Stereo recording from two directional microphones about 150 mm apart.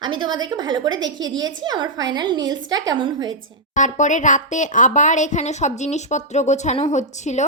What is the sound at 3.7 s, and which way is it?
Speech, 55° left (ahead or behind).